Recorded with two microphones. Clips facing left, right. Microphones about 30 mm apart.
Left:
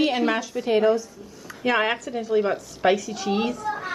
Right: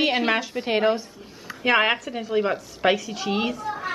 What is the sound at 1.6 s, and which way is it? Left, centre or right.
A woman's voice, right.